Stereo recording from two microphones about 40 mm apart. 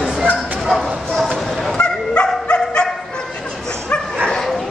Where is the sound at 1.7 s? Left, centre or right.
Left.